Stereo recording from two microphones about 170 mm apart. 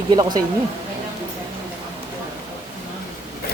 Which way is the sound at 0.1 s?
25° right (ahead or behind).